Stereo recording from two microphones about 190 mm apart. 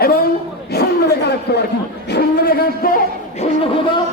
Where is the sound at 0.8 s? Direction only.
60° left (ahead or behind).